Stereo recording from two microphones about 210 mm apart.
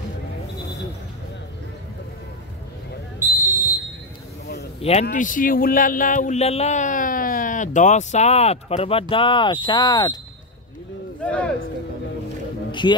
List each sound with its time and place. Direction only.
3.2 s basketball bounce: 10° right (ahead or behind)
5.0 s speech: 40° left (ahead or behind); by 10.1 s 20° left (ahead or behind)
11.2 s speech: 5° left (ahead or behind)